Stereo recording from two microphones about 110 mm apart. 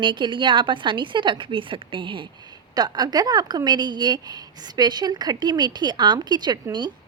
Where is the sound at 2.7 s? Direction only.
40° right (ahead or behind).